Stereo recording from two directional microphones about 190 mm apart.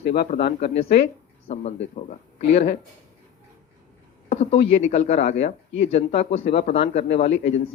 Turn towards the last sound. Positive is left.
turn(degrees=35)  # may be behind; listen again after turning